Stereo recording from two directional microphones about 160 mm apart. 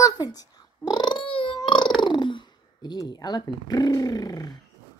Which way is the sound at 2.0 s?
30° left (ahead or behind).